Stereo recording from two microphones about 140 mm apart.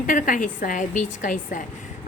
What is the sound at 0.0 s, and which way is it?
A woman's voice, 70° left (ahead or behind).